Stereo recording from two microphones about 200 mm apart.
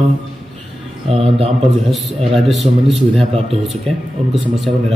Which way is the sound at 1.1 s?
30° right (ahead or behind).